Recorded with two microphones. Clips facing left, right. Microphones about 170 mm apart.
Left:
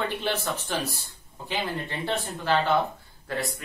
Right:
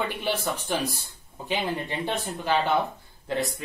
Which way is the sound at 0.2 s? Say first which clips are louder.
Right 1 dB; 15° right (ahead or behind).